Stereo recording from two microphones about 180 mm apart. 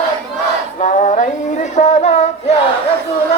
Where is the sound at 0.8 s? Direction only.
45° left (ahead or behind).